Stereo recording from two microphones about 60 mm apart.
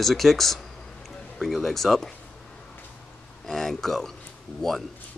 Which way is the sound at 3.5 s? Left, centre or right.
Centre.